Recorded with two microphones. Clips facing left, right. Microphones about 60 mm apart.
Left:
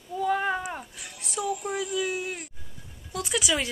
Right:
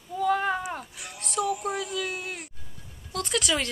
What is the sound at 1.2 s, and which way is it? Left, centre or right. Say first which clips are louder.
Music: right 2 dB; centre.